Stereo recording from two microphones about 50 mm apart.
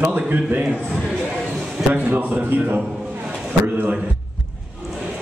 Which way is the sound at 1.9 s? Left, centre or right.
Right.